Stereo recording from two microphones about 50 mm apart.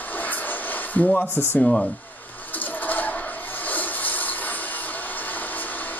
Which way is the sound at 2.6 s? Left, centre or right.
Left.